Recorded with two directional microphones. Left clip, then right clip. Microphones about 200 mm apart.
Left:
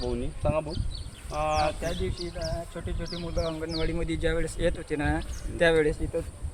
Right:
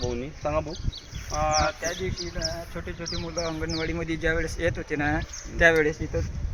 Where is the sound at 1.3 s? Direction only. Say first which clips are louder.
Right 2 dB; 25° left (ahead or behind).